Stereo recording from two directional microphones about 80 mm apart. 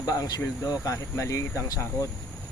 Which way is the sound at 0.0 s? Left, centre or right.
Left.